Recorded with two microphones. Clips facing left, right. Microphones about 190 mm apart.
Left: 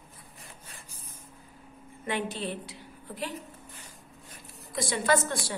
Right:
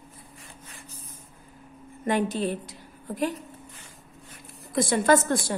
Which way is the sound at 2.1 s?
45° right (ahead or behind).